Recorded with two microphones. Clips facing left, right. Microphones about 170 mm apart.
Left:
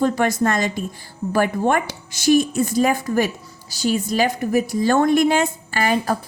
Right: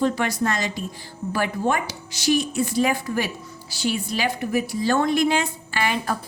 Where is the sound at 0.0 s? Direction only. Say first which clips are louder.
Left 4 dB; 50° left (ahead or behind).